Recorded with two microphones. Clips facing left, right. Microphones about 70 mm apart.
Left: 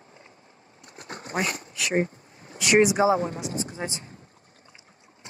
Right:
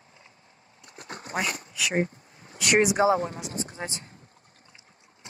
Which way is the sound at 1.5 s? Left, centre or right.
Left.